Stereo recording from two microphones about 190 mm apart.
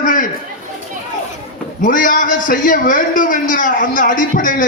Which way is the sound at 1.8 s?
45° left (ahead or behind).